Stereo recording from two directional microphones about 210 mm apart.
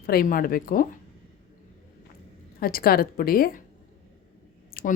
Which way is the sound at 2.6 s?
45° left (ahead or behind).